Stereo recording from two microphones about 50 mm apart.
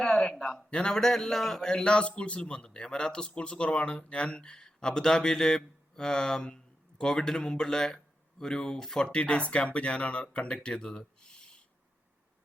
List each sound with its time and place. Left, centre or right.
0.0 s a sound: centre
0.7 s a man's voice: centre
9.1 s speech: left